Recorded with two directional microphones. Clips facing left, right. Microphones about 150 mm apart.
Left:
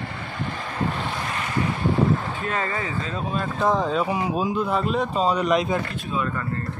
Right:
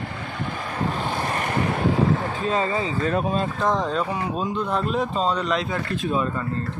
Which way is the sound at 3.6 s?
5° left (ahead or behind).